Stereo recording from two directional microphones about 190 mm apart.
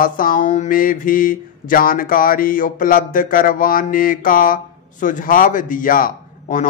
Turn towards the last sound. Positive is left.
turn(degrees=45)  # may be behind; listen again after turning